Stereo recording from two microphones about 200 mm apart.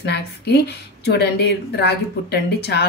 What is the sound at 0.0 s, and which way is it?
A woman's voice, 55° left (ahead or behind).